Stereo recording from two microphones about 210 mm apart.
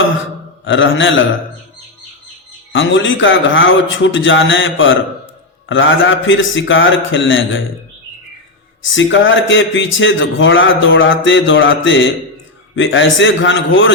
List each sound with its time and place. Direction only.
0.6 s speech: 65° left (ahead or behind)
2.7 s speech: 65° left (ahead or behind)
8.8 s speech: 65° left (ahead or behind)